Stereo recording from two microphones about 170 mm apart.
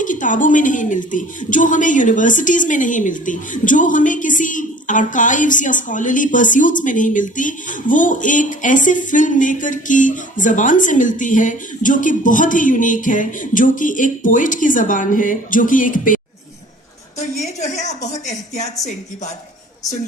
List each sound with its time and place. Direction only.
0.0 s a woman's voice: 50° left (ahead or behind)
17.6 s a woman's voice: 45° left (ahead or behind)